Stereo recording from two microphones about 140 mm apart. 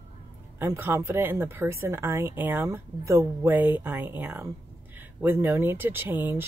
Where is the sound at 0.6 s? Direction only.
15° right (ahead or behind).